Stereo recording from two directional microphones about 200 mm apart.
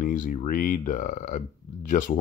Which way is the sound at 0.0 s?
40° left (ahead or behind).